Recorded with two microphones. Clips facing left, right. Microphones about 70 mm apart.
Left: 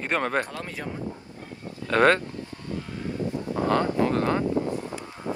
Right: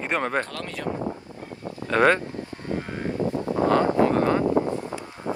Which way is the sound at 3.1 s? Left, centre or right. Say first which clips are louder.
Right 3 dB; right.